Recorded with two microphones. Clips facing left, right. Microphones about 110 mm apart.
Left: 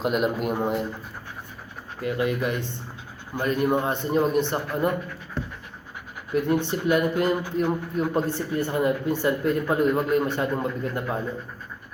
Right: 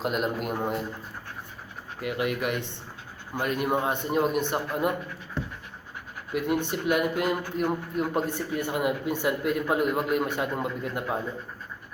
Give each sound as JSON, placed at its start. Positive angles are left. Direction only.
{"t": 0.0, "sound": "a man's voice", "side_deg": 5}
{"t": 2.0, "sound": "a man's voice", "side_deg": -15}
{"t": 3.3, "sound": "a man's voice", "side_deg": -5}
{"t": 6.3, "sound": "a man's voice", "side_deg": -10}